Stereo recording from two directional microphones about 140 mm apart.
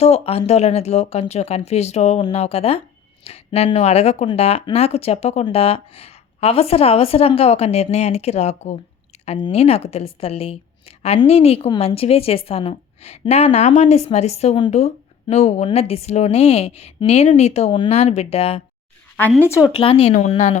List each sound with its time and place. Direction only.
0.0 s a woman's voice: 45° left (ahead or behind)
9.1 s a sound: 45° left (ahead or behind)
9.5 s a woman's voice: 45° left (ahead or behind)
19.4 s speech: 20° left (ahead or behind)
19.8 s a woman's voice: 45° left (ahead or behind)